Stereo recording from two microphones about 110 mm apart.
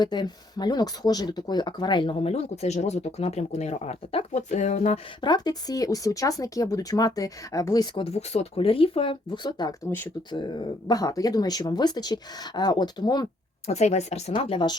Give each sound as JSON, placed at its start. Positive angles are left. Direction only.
{"t": 0.0, "sound": "speech", "side_deg": 40}
{"t": 2.2, "sound": "speech", "side_deg": 75}
{"t": 5.2, "sound": "speech", "side_deg": 40}
{"t": 7.9, "sound": "speech", "side_deg": 70}
{"t": 13.7, "sound": "speech", "side_deg": 85}
{"t": 14.3, "sound": "speech", "side_deg": 45}